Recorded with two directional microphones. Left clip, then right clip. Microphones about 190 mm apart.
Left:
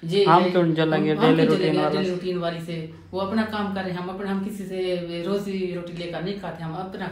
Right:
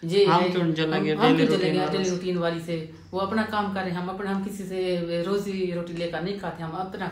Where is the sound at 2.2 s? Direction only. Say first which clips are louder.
Even; 20° right (ahead or behind).